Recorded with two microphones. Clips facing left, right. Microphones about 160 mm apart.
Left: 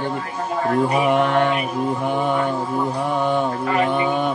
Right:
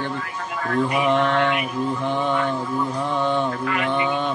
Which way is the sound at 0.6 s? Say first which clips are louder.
Left 3 dB; 30° left (ahead or behind).